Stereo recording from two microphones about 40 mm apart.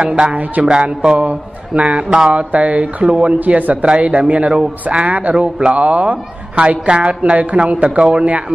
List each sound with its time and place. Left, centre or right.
0.0 s a man's voice: right
0.7 s a man's voice: right
3.3 s a man's voice: right
3.8 s a man's voice: right